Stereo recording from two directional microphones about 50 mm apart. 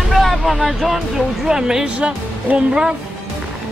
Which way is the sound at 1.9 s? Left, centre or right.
Right.